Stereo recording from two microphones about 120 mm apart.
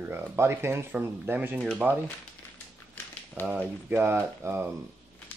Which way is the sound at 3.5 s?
10° right (ahead or behind).